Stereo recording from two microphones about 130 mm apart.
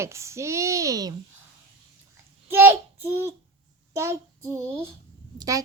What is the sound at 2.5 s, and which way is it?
Speech, 15° right (ahead or behind).